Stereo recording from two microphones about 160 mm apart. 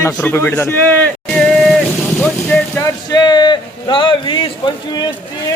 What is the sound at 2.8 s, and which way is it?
A man's voice, 25° left (ahead or behind).